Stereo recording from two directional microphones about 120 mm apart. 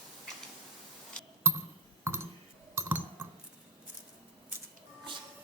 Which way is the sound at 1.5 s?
20° right (ahead or behind).